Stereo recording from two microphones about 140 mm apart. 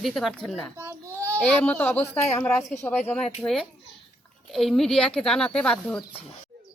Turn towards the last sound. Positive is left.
turn(degrees=5)  # may be behind; listen again after turning